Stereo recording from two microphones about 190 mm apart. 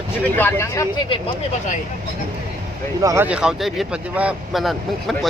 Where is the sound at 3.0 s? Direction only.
20° right (ahead or behind).